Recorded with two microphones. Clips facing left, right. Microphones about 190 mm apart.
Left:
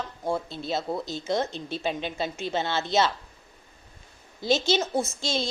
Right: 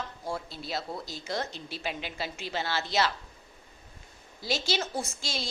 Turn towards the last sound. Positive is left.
turn(degrees=25)  # may be behind; listen again after turning